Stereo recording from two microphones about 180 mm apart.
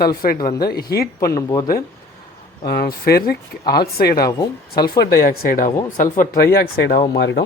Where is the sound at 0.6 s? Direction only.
60° left (ahead or behind).